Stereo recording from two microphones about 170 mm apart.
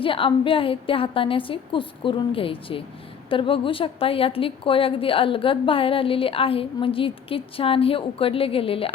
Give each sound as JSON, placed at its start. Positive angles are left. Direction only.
{"t": 0.0, "sound": "a woman's voice", "side_deg": 30}